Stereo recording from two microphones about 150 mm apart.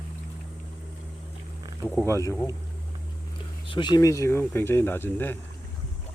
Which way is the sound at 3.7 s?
30° left (ahead or behind).